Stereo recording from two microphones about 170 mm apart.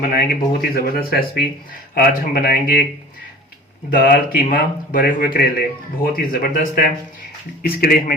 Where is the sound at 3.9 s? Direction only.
55° left (ahead or behind).